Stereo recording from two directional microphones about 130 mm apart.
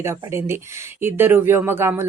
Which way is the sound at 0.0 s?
20° right (ahead or behind).